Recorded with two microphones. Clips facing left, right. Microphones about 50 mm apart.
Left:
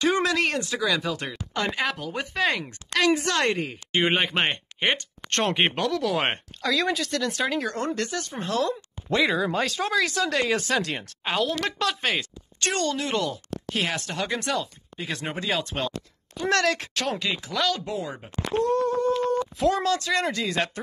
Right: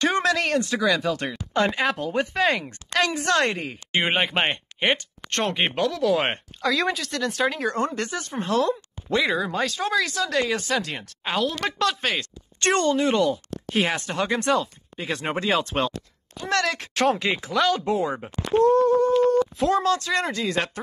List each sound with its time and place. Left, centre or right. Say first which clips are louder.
0.0 s a sound: right 1 dB; centre
0.5 s speech: right 3 dB; centre
2.3 s speech: left 2 dB; centre
9.1 s speech: even; centre
12.6 s speech: right 5 dB; right
12.9 s speech: right 6 dB; centre
13.7 s speech: right 4 dB; centre
15.0 s speech: right 4 dB; right
16.3 s speech: left 1 dB; centre
17.1 s speech: right 5 dB; right
18.8 s a sound: right 5 dB; right
19.4 s speech: right 2 dB; centre